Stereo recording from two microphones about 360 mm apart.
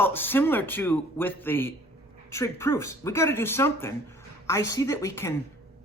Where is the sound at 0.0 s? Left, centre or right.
Centre.